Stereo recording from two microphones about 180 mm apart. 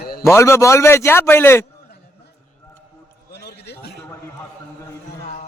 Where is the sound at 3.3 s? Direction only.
70° left (ahead or behind).